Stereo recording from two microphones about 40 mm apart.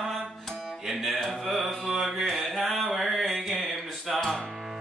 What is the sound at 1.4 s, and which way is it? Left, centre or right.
Mantra, centre.